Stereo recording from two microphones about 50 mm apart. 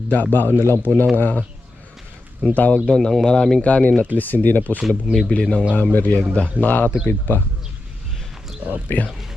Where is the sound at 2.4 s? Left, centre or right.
Left.